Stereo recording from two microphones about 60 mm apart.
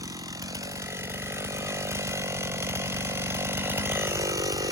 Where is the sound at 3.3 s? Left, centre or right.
Right.